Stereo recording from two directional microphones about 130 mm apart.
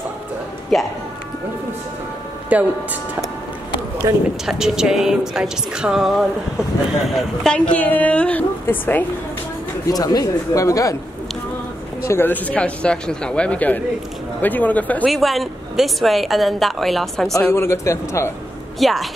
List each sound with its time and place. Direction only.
0.7 s a woman's voice: centre (ahead or behind)
2.5 s speech: 10° right (ahead or behind)
4.0 s a man's voice: 25° right (ahead or behind)
4.5 s a woman's voice: 5° right (ahead or behind); by 9.0 s 15° left (ahead or behind)
9.8 s speech: 30° left (ahead or behind)
12.0 s a woman's voice: 20° left (ahead or behind)
15.0 s a woman's voice: centre (ahead or behind)
17.3 s speech: 20° left (ahead or behind)
18.8 s a woman's voice: centre (ahead or behind)